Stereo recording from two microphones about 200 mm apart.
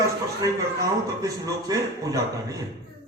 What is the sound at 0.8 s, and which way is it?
A man's voice, 15° right (ahead or behind).